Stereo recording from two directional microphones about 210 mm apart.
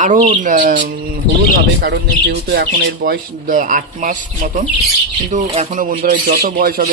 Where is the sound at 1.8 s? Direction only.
50° right (ahead or behind).